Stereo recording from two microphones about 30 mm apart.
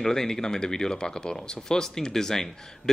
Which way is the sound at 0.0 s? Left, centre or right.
Centre.